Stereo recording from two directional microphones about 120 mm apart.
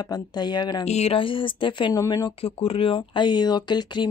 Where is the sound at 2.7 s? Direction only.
50° left (ahead or behind).